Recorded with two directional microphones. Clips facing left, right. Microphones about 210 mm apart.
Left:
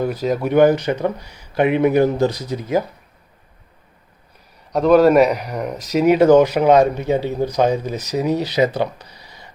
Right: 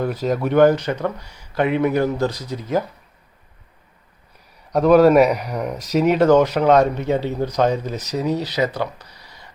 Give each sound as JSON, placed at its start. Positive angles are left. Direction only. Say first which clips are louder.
{"t": 0.0, "sound": "speech", "louder": "left 1 dB", "side_deg": 0}
{"t": 4.7, "sound": "speech", "louder": "even", "side_deg": 0}
{"t": 6.1, "sound": "speech", "louder": "left 3 dB", "side_deg": 15}